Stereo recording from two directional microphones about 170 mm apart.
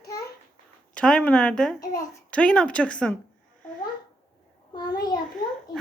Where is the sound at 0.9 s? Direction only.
5° left (ahead or behind).